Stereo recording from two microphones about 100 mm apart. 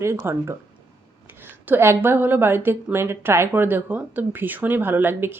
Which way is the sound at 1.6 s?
20° right (ahead or behind).